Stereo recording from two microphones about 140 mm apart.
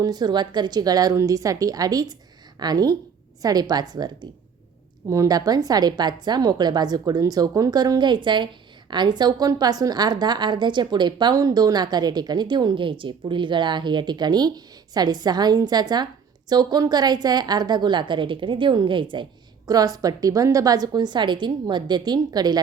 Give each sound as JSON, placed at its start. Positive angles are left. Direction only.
{"t": 0.0, "sound": "a woman's voice", "side_deg": -30}